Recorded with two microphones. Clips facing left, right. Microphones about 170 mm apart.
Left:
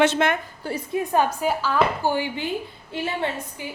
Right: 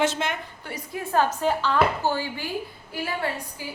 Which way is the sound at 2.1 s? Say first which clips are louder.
Left 3 dB; 20° left (ahead or behind).